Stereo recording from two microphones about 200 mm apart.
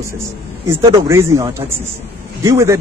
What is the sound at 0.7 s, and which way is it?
Speech, 15° right (ahead or behind).